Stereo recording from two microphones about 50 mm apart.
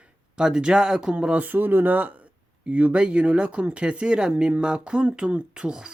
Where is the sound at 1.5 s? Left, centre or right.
Right.